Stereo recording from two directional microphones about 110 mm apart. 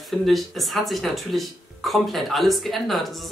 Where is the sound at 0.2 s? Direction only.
Centre (ahead or behind).